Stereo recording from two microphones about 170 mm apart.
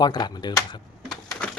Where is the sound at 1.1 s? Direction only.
Centre (ahead or behind).